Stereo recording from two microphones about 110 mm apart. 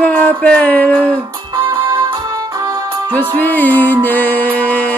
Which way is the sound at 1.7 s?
40° right (ahead or behind).